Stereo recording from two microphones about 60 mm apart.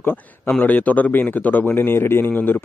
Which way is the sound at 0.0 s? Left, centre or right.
Left.